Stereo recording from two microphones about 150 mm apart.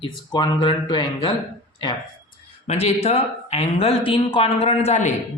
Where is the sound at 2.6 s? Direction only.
45° left (ahead or behind).